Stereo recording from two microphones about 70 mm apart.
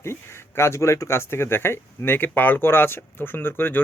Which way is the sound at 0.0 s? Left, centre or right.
Left.